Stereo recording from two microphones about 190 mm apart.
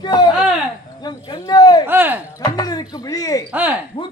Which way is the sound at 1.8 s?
10° right (ahead or behind).